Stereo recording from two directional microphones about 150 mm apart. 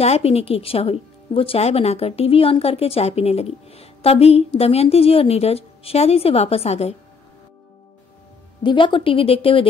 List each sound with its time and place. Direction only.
0.0 s speech: 45° left (ahead or behind)
8.6 s speech: 35° left (ahead or behind)